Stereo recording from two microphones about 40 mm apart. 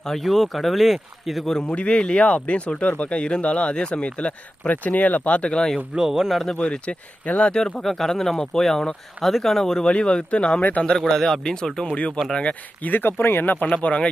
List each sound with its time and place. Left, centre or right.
0.2 s speech: centre
1.5 s speech: centre
1.7 s speech: left
4.7 s speech: left
5.7 s speech: centre
7.3 s speech: left
7.8 s speech: centre
9.8 s speech: left
10.6 s speech: left
10.8 s speech: centre
11.9 s speech: left
12.8 s speech: left
13.1 s speech: left